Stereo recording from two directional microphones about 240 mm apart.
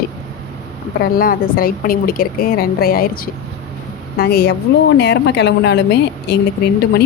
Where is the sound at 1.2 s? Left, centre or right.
Left.